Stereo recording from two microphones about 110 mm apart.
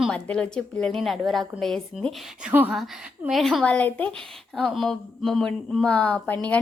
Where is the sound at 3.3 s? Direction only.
Centre (ahead or behind).